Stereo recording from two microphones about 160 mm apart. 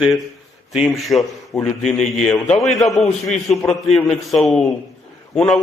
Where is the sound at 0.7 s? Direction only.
Centre (ahead or behind).